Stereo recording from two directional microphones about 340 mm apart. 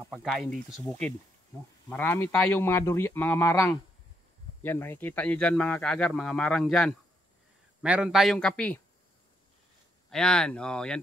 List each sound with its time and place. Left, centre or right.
0.0 s speech: centre
10.0 s speech: centre